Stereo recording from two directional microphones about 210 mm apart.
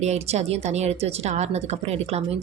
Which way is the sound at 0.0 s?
30° right (ahead or behind).